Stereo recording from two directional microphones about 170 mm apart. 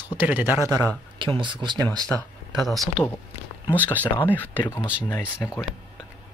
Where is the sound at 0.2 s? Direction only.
10° right (ahead or behind); by 1.9 s 25° right (ahead or behind).